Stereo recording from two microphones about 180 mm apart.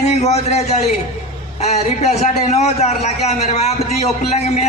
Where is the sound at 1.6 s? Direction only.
40° left (ahead or behind).